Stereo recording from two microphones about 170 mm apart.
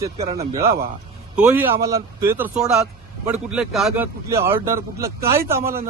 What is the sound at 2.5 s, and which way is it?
A man's voice, 5° right (ahead or behind).